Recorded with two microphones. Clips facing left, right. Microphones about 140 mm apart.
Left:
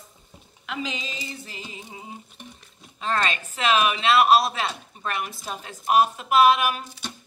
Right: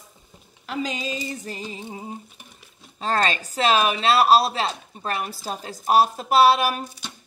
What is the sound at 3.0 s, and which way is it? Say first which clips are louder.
Speech: right 3 dB; 35° right (ahead or behind).